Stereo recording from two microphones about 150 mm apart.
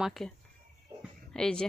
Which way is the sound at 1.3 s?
5° left (ahead or behind).